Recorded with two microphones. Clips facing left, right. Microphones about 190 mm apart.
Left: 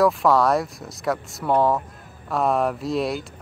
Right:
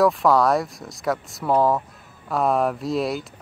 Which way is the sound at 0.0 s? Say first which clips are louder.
Even; centre (ahead or behind).